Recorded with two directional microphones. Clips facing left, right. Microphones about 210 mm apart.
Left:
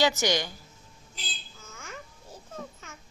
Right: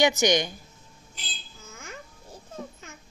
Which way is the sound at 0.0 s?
15° right (ahead or behind).